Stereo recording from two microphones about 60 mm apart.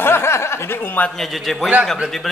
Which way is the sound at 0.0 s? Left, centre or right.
Left.